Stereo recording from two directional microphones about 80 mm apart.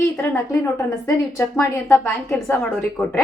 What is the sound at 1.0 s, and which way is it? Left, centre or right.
A woman's voice, left.